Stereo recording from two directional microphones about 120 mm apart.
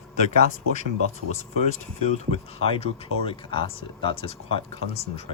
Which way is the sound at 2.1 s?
60° left (ahead or behind).